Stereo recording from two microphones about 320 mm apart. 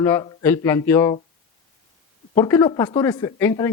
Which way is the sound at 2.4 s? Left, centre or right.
Centre.